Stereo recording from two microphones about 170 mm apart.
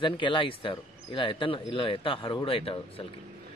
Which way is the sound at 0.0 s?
30° left (ahead or behind).